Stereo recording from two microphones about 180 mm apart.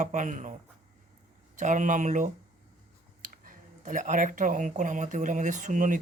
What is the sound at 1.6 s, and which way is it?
Speech, 45° right (ahead or behind).